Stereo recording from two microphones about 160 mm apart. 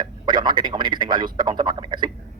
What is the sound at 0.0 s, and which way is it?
A man's voice, 30° right (ahead or behind).